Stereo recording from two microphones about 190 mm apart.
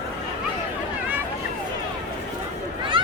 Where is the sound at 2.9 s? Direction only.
25° right (ahead or behind).